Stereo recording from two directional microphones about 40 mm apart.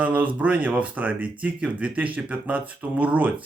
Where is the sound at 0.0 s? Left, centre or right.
Right.